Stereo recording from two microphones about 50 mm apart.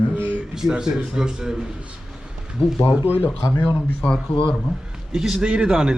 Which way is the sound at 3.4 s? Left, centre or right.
Left.